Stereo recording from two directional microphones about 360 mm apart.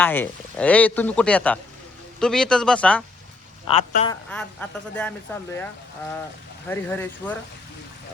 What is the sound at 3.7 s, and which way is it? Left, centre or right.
Speech, centre.